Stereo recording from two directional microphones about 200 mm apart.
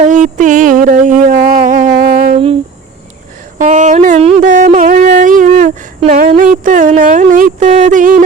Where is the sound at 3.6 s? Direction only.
40° right (ahead or behind).